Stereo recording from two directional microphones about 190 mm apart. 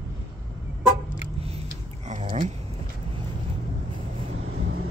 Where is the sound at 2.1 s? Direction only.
40° right (ahead or behind).